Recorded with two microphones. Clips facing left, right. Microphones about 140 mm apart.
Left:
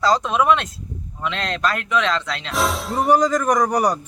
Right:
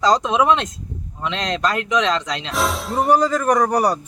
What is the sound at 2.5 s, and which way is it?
Speech, centre (ahead or behind).